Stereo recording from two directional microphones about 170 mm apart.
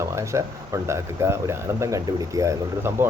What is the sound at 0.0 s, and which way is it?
Speech, 15° right (ahead or behind).